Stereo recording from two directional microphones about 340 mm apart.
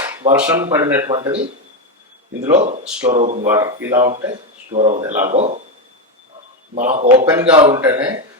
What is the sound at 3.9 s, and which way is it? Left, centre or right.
Speech, centre.